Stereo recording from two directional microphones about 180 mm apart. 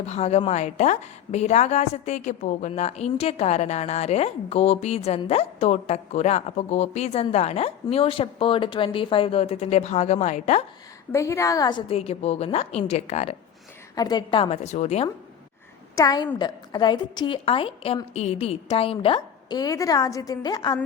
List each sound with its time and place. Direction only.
0.0 s a woman's voice: 35° left (ahead or behind)
11.1 s a woman's voice: 15° left (ahead or behind); by 13.3 s 35° left (ahead or behind)
13.9 s a woman's voice: 20° left (ahead or behind); by 15.1 s 35° left (ahead or behind)
16.0 s a woman's voice: 20° left (ahead or behind)